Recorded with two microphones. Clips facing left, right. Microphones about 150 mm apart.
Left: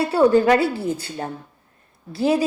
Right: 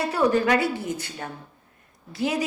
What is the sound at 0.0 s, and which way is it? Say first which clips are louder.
A woman's voice: left 6 dB; 30° left (ahead or behind).